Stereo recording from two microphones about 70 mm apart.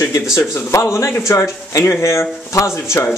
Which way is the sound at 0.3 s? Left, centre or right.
Left.